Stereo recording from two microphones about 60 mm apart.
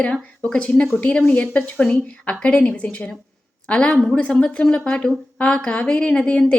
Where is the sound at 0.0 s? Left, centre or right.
Left.